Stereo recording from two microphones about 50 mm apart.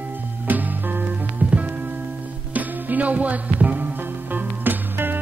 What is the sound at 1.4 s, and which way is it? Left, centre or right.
Music, right.